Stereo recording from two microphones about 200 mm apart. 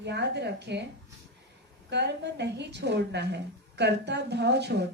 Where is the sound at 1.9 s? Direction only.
60° right (ahead or behind).